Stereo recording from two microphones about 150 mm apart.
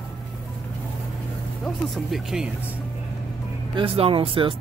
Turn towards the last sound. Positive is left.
turn(degrees=-35)  # may be behind; listen again after turning